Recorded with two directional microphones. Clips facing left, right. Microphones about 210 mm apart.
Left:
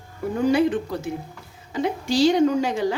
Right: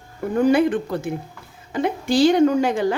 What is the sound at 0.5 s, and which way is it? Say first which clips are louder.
A woman's voice: right 2 dB; 55° right (ahead or behind).